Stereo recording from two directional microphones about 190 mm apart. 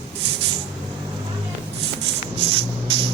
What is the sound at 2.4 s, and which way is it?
Music, 30° right (ahead or behind).